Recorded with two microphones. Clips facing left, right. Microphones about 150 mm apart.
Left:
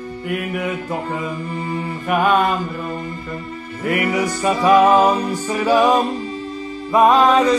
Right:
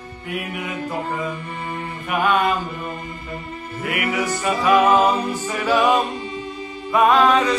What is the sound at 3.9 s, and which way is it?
Music, 40° left (ahead or behind).